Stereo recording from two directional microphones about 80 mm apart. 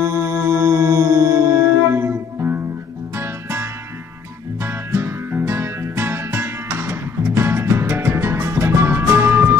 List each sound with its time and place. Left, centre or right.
0.0 s music: right